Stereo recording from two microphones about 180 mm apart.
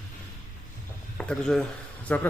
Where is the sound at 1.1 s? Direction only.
5° left (ahead or behind).